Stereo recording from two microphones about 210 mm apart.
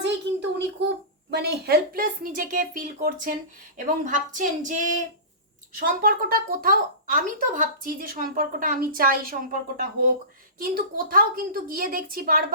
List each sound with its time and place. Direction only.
1.3 s a woman's voice: 50° right (ahead or behind)